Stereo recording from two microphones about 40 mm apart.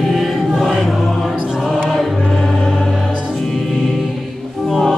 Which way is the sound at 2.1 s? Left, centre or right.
Centre.